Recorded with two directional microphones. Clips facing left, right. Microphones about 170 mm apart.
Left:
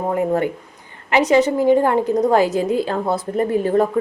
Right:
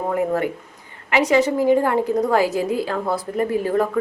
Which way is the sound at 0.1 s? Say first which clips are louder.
Left 2 dB; 25° left (ahead or behind).